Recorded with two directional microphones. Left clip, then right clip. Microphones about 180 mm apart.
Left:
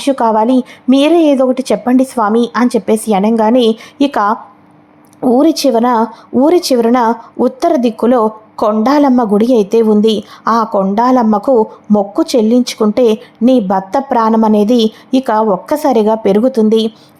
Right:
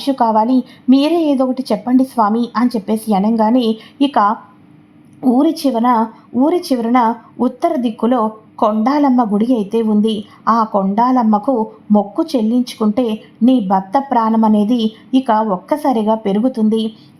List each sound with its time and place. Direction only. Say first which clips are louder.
0.0 s speech: left 3 dB; 20° left (ahead or behind)